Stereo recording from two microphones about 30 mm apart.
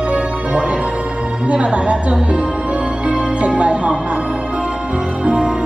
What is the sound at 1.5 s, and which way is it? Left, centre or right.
Music, right.